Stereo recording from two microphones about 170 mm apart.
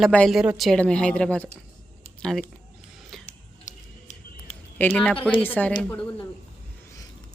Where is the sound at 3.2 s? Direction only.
45° left (ahead or behind).